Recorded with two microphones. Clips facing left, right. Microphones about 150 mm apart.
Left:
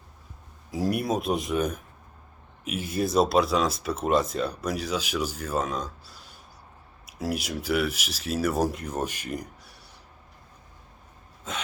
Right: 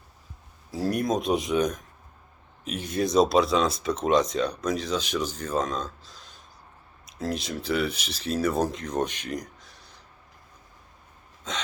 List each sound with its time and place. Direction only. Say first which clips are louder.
0.7 s speech: right 1 dB; 10° left (ahead or behind)
11.5 s speech: right 1 dB; 5° left (ahead or behind)